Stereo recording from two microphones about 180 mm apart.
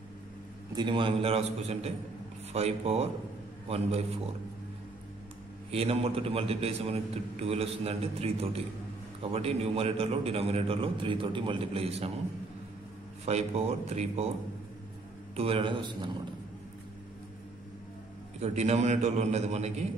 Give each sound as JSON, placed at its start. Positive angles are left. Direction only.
{"t": 0.7, "sound": "a man's voice", "side_deg": -25}
{"t": 5.7, "sound": "a man's voice", "side_deg": -35}
{"t": 13.2, "sound": "a man's voice", "side_deg": -35}
{"t": 15.3, "sound": "a man's voice", "side_deg": -30}
{"t": 18.4, "sound": "a man's voice", "side_deg": -35}